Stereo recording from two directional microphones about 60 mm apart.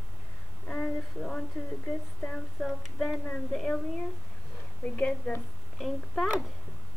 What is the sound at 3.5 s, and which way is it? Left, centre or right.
Speech, centre.